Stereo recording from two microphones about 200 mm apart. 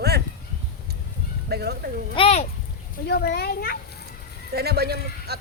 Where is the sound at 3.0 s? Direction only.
50° left (ahead or behind).